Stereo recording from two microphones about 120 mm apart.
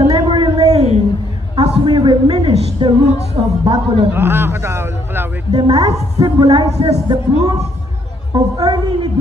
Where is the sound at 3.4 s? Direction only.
45° right (ahead or behind).